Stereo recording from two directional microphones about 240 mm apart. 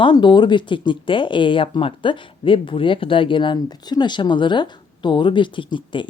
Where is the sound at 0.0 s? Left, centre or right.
Centre.